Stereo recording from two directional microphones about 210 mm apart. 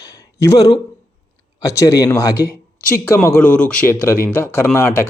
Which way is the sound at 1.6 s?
15° left (ahead or behind).